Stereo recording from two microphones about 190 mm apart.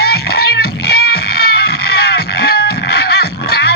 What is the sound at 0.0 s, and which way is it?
Music, 55° left (ahead or behind).